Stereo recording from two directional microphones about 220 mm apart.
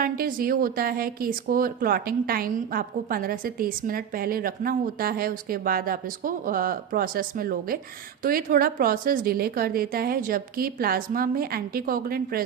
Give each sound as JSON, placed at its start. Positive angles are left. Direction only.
{"t": 0.0, "sound": "a woman's voice", "side_deg": -40}